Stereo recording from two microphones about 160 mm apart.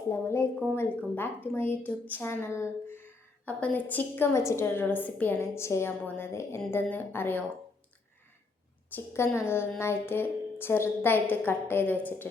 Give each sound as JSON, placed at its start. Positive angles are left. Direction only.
{"t": 0.1, "sound": "a woman's voice", "side_deg": 20}
{"t": 8.9, "sound": "a woman's voice", "side_deg": 15}